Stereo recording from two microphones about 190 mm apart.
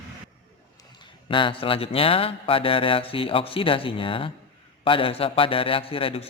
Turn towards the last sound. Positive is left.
turn(degrees=30)  # may be behind; listen again after turning